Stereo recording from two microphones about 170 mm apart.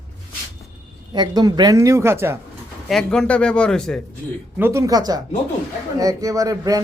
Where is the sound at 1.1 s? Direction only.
25° right (ahead or behind).